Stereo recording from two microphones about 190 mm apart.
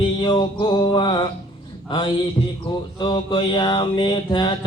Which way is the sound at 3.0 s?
25° left (ahead or behind).